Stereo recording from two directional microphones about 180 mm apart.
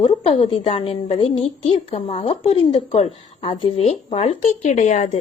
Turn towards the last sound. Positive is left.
turn(degrees=40)  # may be behind; listen again after turning